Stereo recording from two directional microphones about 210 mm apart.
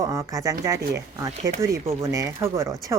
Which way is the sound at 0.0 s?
15° right (ahead or behind).